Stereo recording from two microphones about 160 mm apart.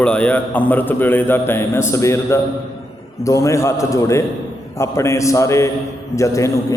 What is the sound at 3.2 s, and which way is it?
Mantra, 20° left (ahead or behind).